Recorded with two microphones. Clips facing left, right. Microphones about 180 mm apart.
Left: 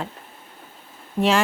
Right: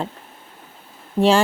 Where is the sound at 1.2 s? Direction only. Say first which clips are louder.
Right 4 dB; 30° right (ahead or behind).